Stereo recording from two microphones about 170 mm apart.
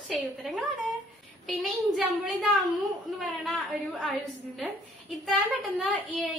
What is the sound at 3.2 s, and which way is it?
A child's voice, centre (ahead or behind).